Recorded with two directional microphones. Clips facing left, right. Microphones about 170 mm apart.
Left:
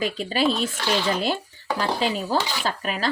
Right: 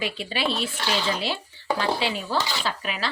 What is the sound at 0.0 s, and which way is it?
Speech, 40° left (ahead or behind).